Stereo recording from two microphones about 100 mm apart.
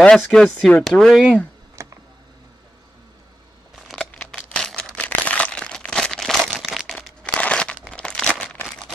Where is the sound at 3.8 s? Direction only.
5° left (ahead or behind).